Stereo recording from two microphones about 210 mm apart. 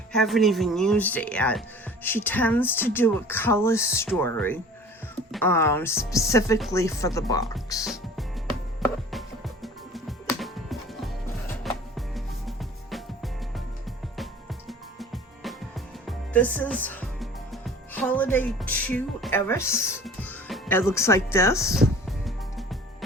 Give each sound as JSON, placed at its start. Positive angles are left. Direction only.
{"t": 0.1, "sound": "speech", "side_deg": 0}
{"t": 8.8, "sound": "music", "side_deg": 0}
{"t": 14.7, "sound": "music", "side_deg": 0}
{"t": 16.0, "sound": "speech", "side_deg": 5}
{"t": 22.2, "sound": "music", "side_deg": 0}